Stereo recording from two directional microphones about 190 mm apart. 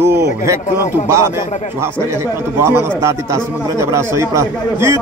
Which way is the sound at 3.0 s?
15° right (ahead or behind).